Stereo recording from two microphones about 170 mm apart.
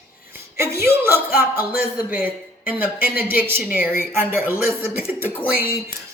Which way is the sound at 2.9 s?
60° left (ahead or behind).